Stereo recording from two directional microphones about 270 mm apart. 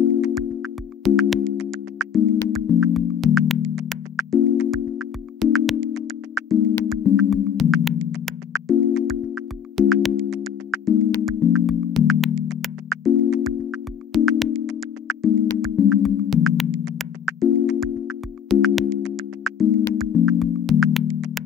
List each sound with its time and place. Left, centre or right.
0.2 s music: centre